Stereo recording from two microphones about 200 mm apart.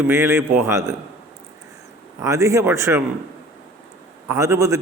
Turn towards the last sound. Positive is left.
turn(degrees=-15)  # may be behind; listen again after turning